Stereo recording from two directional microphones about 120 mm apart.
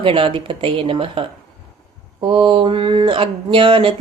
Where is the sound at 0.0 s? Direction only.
50° right (ahead or behind).